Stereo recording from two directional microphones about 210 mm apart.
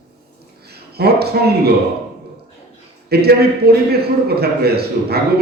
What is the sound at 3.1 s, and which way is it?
A man's voice, 50° right (ahead or behind).